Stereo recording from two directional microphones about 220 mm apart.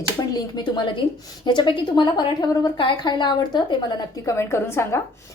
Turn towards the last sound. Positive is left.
turn(degrees=10)  # may be behind; listen again after turning